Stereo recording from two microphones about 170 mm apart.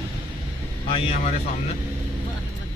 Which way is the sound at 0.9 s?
35° left (ahead or behind).